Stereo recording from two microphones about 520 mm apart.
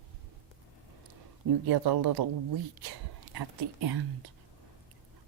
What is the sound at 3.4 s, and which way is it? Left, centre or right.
Speech, right.